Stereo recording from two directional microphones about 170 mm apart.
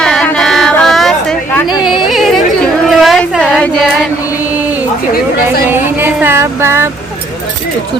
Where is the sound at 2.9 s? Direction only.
Centre (ahead or behind).